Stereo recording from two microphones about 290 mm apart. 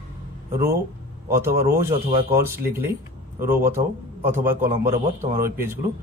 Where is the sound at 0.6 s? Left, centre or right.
Right.